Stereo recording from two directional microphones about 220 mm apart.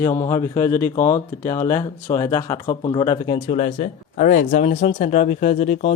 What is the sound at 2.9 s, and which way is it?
Speech, 20° left (ahead or behind).